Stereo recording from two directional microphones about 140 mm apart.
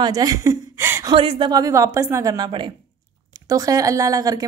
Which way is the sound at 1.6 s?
25° right (ahead or behind).